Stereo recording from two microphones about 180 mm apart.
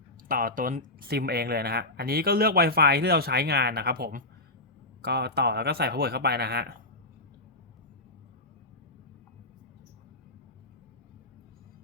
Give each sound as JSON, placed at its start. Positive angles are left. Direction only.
{"t": 0.3, "sound": "speech", "side_deg": -50}